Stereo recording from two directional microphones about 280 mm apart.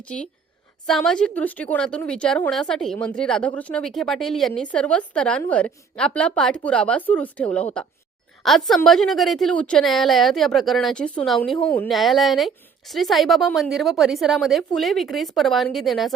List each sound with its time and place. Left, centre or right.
0.0 s a woman's voice: centre